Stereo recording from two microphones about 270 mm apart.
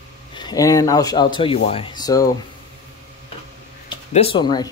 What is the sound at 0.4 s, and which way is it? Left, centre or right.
Speech, centre.